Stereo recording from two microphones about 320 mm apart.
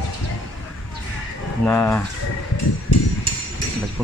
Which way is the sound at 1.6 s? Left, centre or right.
Centre.